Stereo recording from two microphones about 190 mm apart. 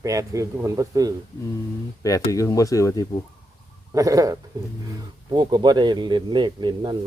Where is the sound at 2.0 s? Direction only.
15° left (ahead or behind).